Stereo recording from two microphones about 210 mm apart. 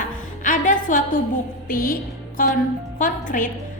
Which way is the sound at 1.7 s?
40° left (ahead or behind).